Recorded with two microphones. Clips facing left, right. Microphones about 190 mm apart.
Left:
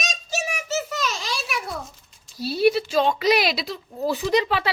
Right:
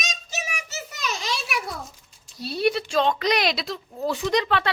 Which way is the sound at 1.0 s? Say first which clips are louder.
Left 1 dB; 20° right (ahead or behind).